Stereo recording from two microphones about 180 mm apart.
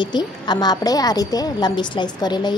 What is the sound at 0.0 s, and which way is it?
A woman's voice, 25° left (ahead or behind).